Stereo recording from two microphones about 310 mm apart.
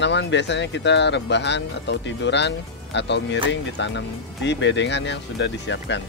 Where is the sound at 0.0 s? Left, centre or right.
Left.